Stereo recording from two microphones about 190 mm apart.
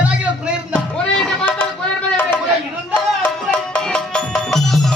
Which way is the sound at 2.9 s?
10° left (ahead or behind).